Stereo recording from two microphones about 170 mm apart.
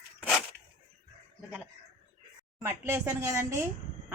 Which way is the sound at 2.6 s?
15° right (ahead or behind).